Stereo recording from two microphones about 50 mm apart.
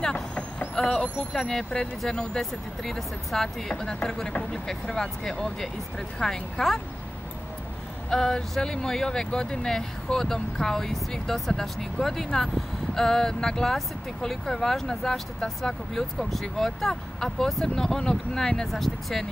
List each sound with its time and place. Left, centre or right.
0.0 s vehicle: left
0.7 s speech: centre
8.1 s speech: centre